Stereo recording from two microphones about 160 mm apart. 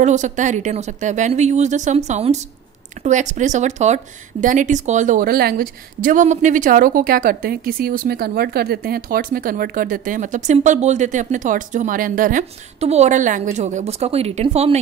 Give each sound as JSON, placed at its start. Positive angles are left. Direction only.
{"t": 0.0, "sound": "speech", "side_deg": -50}
{"t": 12.8, "sound": "speech", "side_deg": -45}